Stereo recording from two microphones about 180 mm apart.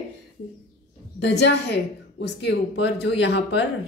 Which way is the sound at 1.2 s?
65° left (ahead or behind).